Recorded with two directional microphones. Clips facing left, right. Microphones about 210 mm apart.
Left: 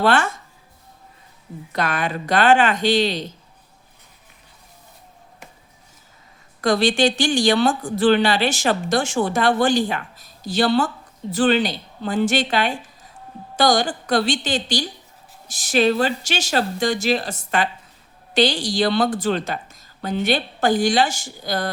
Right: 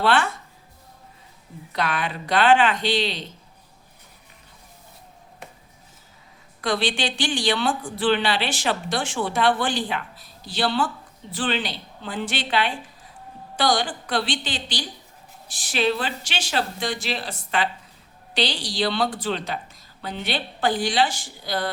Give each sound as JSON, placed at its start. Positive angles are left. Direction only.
{"t": 0.0, "sound": "speech", "side_deg": 45}
{"t": 1.7, "sound": "speech", "side_deg": 45}
{"t": 6.6, "sound": "speech", "side_deg": 45}